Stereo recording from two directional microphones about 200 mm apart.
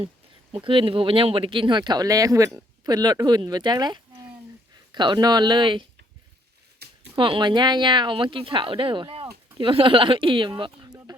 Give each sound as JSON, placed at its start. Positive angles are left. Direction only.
{"t": 0.5, "sound": "speech", "side_deg": -25}
{"t": 6.8, "sound": "a sound", "side_deg": -55}
{"t": 7.2, "sound": "speech", "side_deg": -25}